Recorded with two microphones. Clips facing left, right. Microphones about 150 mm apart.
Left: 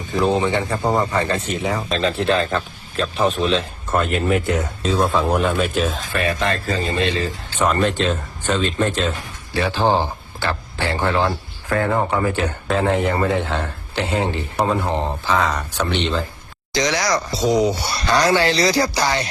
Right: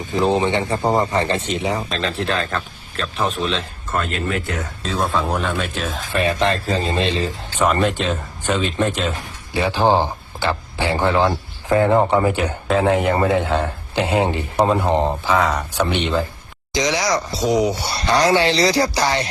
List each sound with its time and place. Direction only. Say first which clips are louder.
0.1 s speech: even; 20° right (ahead or behind)
1.9 s speech: left 4 dB; centre (ahead or behind)
4.3 s speech: left 5 dB; 20° left (ahead or behind)
4.8 s speech: left 1 dB; centre (ahead or behind)
6.1 s speech: right 2 dB; 25° right (ahead or behind)
7.6 s speech: even; 5° right (ahead or behind)
9.5 s a man's voice: right 2 dB; 15° right (ahead or behind)
12.6 s speech: right 2 dB; 5° right (ahead or behind)
17.9 s speech: right 2 dB; 25° right (ahead or behind)